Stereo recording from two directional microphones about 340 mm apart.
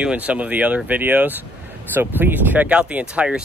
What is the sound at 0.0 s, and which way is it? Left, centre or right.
Speech, centre.